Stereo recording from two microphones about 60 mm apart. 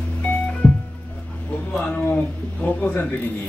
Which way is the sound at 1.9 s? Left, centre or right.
Left.